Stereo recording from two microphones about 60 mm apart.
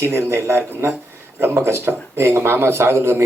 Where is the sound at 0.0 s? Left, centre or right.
Right.